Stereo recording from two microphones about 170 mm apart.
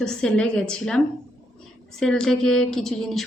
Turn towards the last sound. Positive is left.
turn(degrees=0)  # may be behind; listen again after turning